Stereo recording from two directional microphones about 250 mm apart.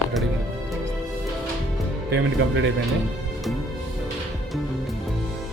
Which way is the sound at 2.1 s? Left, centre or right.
Right.